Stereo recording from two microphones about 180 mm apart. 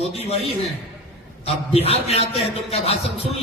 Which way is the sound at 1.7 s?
35° left (ahead or behind).